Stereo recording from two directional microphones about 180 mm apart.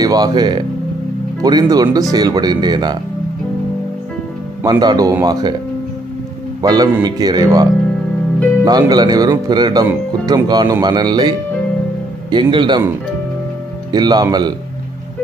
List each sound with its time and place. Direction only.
0.0 s speech: 20° right (ahead or behind)
4.6 s speech: 20° right (ahead or behind)
6.6 s speech: 20° right (ahead or behind)
8.6 s speech: 20° right (ahead or behind)
13.9 s speech: 20° right (ahead or behind)